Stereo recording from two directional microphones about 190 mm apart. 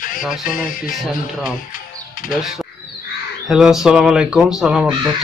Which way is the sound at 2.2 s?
45° left (ahead or behind).